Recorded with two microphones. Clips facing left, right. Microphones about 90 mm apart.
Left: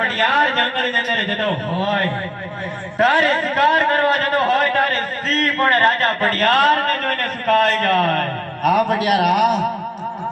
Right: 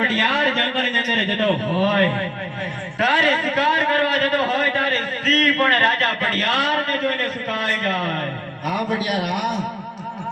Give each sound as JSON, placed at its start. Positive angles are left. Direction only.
{"t": 0.2, "sound": "a man's voice", "side_deg": 45}
{"t": 3.0, "sound": "a man's voice", "side_deg": 40}